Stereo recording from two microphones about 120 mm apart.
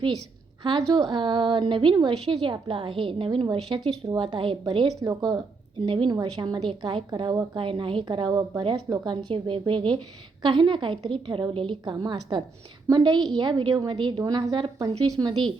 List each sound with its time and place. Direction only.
0.6 s a woman's voice: 40° right (ahead or behind)
4.9 s a woman's voice: 30° right (ahead or behind)
5.8 s a woman's voice: 45° right (ahead or behind)